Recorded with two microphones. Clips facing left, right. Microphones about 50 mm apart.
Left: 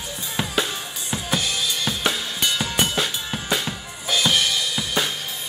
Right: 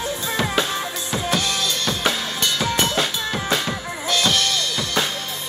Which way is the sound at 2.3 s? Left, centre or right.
Centre.